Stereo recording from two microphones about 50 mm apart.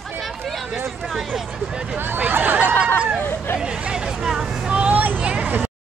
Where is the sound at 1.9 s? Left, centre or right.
Right.